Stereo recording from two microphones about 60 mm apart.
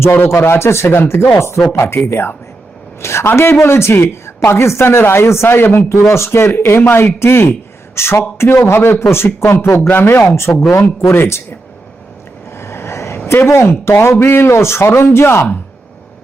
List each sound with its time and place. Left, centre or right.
0.2 s a man's voice: left
2.0 s a man's voice: left
10.7 s speech: left
11.1 s a man's voice: left
12.5 s vehicle: left
13.2 s a man's voice: left